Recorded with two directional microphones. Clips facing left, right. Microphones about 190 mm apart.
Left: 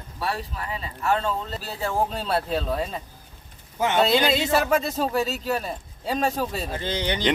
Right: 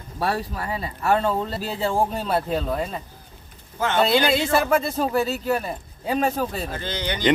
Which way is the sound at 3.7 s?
15° left (ahead or behind).